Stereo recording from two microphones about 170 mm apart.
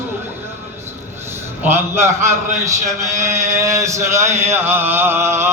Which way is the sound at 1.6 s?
15° right (ahead or behind).